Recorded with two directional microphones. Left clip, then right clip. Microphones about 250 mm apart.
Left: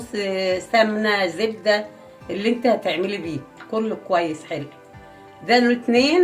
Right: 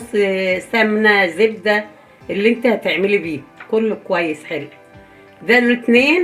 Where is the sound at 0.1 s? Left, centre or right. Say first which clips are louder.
Right 6 dB; right.